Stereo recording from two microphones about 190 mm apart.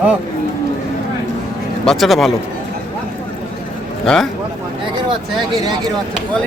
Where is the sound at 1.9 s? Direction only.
Centre (ahead or behind).